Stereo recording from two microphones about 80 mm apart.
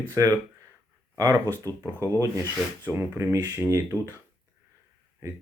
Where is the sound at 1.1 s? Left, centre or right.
Right.